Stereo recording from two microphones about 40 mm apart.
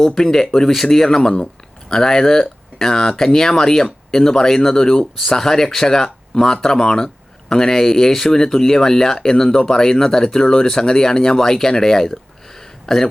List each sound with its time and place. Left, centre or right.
0.0 s speech: centre